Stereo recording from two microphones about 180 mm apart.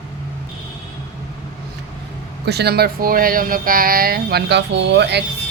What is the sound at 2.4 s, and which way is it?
Speech, 65° right (ahead or behind).